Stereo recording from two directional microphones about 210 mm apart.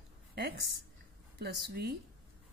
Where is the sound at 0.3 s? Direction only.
50° right (ahead or behind).